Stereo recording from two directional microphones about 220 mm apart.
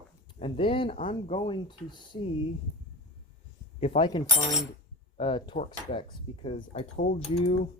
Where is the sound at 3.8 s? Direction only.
25° left (ahead or behind).